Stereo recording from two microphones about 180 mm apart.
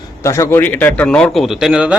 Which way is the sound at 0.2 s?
15° left (ahead or behind).